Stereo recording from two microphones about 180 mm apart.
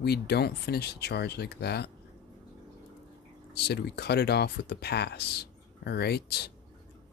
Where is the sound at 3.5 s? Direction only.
65° left (ahead or behind).